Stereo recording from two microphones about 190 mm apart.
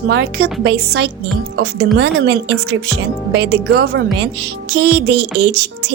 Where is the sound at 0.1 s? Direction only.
60° right (ahead or behind).